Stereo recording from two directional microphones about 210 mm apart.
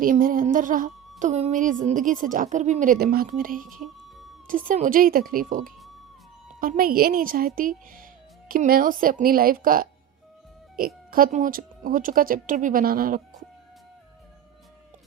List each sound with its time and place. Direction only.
0.0 s a woman's voice: 40° right (ahead or behind)